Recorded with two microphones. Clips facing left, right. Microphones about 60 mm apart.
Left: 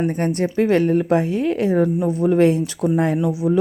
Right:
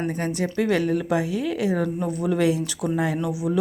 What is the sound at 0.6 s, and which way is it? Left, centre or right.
Speech, left.